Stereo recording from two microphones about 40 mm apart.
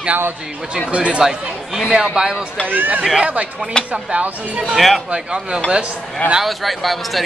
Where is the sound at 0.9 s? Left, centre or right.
Right.